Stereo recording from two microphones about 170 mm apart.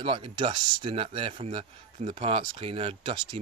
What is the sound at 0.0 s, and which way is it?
Speech, 30° right (ahead or behind).